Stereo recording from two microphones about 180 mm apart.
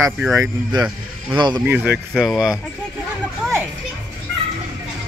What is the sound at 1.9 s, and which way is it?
Speech, centre (ahead or behind).